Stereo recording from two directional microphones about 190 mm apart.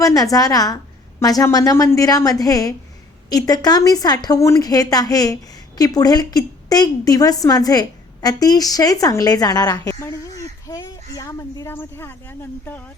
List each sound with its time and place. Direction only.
0.0 s speech: 20° left (ahead or behind)